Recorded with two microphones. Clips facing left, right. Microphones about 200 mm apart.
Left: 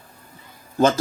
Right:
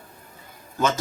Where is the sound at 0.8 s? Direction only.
30° left (ahead or behind).